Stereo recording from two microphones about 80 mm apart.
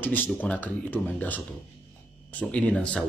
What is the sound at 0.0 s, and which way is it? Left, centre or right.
Speech, left.